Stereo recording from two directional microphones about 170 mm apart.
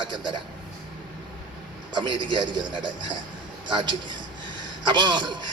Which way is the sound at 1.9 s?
25° right (ahead or behind).